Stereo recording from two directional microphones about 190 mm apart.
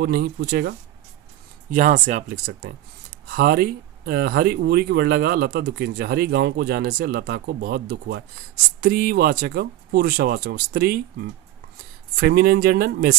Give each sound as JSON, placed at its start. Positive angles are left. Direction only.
{"t": 0.0, "sound": "speech", "side_deg": -55}
{"t": 1.7, "sound": "speech", "side_deg": -45}